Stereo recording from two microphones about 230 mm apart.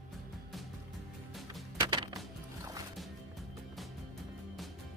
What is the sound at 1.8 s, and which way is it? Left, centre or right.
Wood, centre.